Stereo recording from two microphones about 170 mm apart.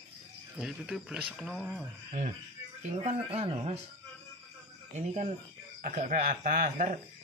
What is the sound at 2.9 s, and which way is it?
Speech, 35° right (ahead or behind).